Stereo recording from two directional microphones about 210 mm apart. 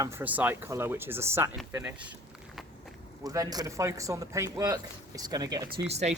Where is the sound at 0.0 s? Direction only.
10° right (ahead or behind).